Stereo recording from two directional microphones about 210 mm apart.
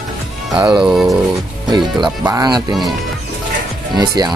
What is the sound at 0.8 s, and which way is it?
Dog, centre (ahead or behind).